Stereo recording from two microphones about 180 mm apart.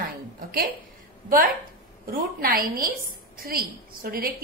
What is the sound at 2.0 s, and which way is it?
A woman's voice, 55° right (ahead or behind).